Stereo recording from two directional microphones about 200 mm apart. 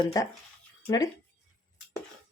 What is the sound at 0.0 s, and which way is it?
Speech, 15° left (ahead or behind).